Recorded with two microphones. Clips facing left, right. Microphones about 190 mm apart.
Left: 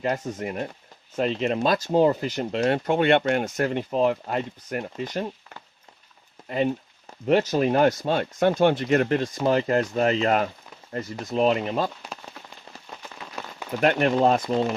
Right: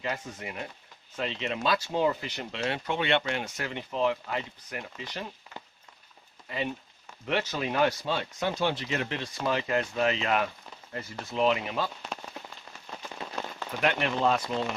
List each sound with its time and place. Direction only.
0.0 s speech: 45° left (ahead or behind)
6.5 s speech: 40° left (ahead or behind)
13.4 s rain on surface: 5° left (ahead or behind)
13.8 s speech: 40° left (ahead or behind)